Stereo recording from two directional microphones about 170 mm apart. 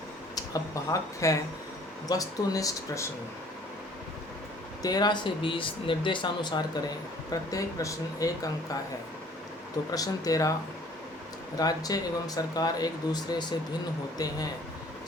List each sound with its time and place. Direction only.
0.3 s speech: 20° left (ahead or behind)
4.8 s speech: 25° left (ahead or behind)
9.9 s speech: 20° left (ahead or behind)
11.5 s speech: 20° left (ahead or behind)